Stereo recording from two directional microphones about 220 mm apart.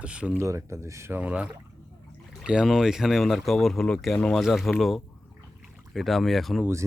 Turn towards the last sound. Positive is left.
turn(degrees=0)  # may be behind; listen again after turning